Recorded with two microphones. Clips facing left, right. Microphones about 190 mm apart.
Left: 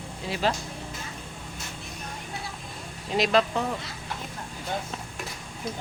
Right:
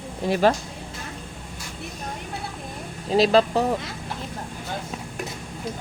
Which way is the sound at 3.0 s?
35° right (ahead or behind).